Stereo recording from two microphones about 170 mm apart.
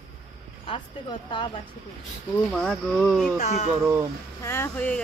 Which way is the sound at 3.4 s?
40° left (ahead or behind).